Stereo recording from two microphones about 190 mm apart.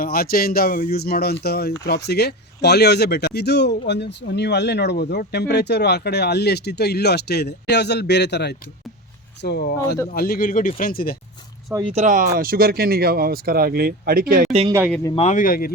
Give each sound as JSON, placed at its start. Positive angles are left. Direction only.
{"t": 0.0, "sound": "speech", "side_deg": 50}
{"t": 11.7, "sound": "speech", "side_deg": -25}
{"t": 11.9, "sound": "speech", "side_deg": -40}
{"t": 14.7, "sound": "speech", "side_deg": -10}
{"t": 15.1, "sound": "speech", "side_deg": 35}